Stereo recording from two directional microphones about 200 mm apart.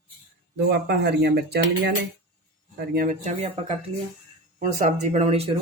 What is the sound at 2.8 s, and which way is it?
Speech, 45° right (ahead or behind).